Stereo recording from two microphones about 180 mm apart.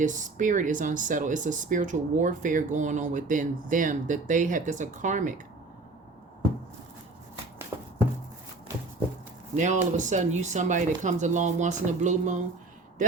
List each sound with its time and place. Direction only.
0.0 s speech: 45° right (ahead or behind)
9.6 s speech: 45° right (ahead or behind)